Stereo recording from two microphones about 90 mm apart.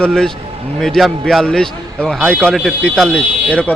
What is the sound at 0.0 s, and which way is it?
A man's voice, 10° left (ahead or behind).